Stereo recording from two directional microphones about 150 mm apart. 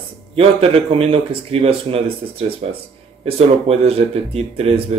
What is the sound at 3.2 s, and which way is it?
Speech, 40° right (ahead or behind).